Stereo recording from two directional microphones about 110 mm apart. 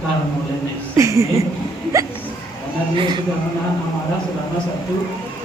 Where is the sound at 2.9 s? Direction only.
50° right (ahead or behind).